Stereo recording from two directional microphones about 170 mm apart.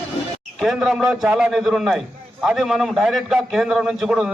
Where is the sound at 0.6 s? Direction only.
Centre (ahead or behind).